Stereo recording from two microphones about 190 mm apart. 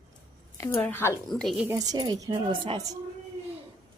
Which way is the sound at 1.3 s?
Centre (ahead or behind).